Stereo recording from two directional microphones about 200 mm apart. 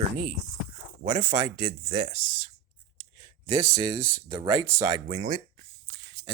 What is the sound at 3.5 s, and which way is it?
Speech, 15° right (ahead or behind).